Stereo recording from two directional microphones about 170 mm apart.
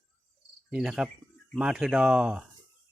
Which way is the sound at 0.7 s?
5° right (ahead or behind).